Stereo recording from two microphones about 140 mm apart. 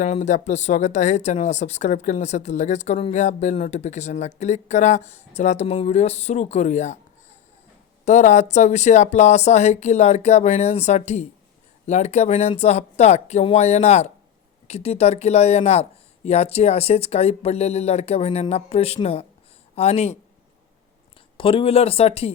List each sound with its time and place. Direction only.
0.0 s speech: 55° left (ahead or behind)
8.0 s speech: 55° left (ahead or behind)
21.3 s speech: 40° left (ahead or behind)